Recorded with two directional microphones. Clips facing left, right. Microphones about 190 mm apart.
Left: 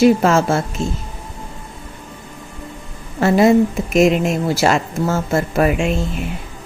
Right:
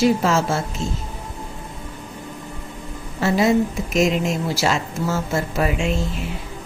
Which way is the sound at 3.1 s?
55° left (ahead or behind).